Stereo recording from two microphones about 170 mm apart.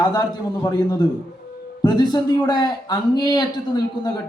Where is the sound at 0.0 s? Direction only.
25° left (ahead or behind).